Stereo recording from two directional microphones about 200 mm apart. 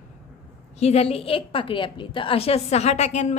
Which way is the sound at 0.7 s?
30° left (ahead or behind).